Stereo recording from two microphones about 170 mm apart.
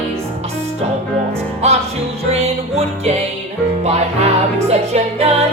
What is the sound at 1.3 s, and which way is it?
Music, 35° right (ahead or behind).